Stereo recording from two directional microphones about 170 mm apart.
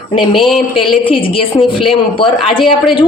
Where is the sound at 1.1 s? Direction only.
30° left (ahead or behind).